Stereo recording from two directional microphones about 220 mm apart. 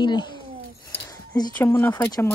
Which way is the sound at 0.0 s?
20° left (ahead or behind).